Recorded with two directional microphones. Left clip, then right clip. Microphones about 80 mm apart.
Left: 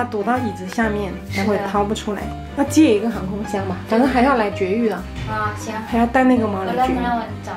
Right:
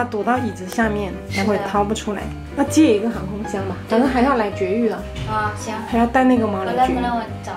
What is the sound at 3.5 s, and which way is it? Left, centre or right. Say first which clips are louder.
Speech: left 2 dB; left.